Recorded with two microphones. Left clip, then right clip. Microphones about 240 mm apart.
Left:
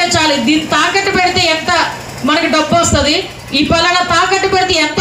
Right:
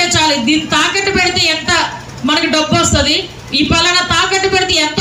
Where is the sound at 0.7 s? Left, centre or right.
Left.